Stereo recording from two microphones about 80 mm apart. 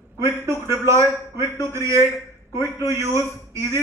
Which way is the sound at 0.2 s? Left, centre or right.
Right.